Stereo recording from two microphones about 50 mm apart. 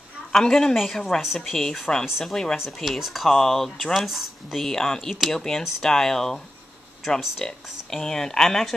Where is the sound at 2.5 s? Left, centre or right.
Centre.